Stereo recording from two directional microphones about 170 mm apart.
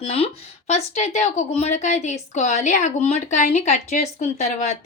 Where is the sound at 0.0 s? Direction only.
35° left (ahead or behind).